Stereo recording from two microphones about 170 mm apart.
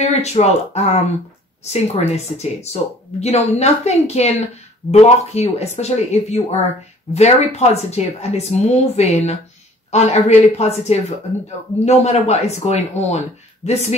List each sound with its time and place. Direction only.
0.0 s speech: 40° left (ahead or behind)